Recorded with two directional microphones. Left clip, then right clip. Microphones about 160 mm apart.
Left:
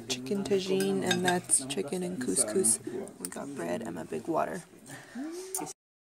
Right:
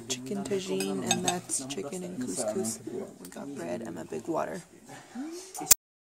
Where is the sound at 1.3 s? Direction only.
20° left (ahead or behind).